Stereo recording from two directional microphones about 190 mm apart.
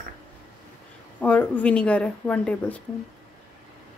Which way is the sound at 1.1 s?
10° left (ahead or behind).